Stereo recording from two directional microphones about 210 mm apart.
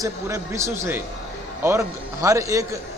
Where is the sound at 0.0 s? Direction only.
15° right (ahead or behind).